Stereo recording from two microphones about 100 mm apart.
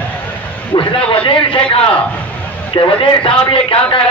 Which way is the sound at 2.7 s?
60° left (ahead or behind).